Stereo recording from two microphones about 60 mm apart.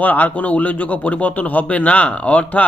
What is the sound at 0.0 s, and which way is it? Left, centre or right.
Speech, left.